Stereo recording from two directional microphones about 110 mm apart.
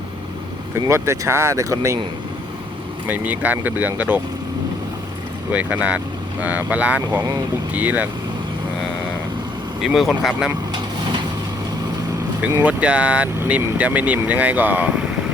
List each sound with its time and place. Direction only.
0.9 s speech: 25° right (ahead or behind)
3.1 s speech: 15° right (ahead or behind)
5.5 s speech: 15° right (ahead or behind)
9.8 s speech: 5° right (ahead or behind)
10.7 s vehicle: 40° right (ahead or behind)
12.6 s speech: 10° right (ahead or behind)